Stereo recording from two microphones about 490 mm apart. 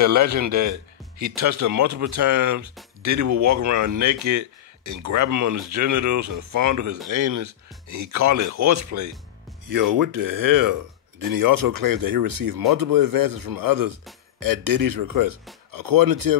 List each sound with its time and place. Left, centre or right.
0.0 s a man's voice: right